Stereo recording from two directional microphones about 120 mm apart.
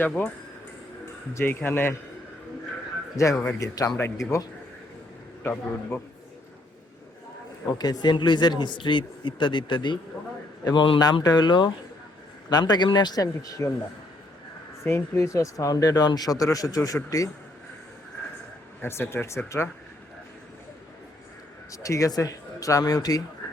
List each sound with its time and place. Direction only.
1.3 s speech: 20° left (ahead or behind)
3.2 s speech: 25° left (ahead or behind)
7.8 s speech: 35° left (ahead or behind)
14.8 s speech: 20° left (ahead or behind)
18.8 s speech: 20° left (ahead or behind)
21.7 s speech: 25° left (ahead or behind)